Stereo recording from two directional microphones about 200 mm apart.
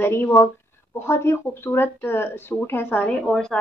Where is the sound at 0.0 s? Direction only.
15° left (ahead or behind).